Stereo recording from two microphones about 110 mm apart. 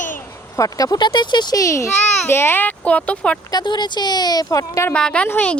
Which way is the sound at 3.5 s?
40° left (ahead or behind).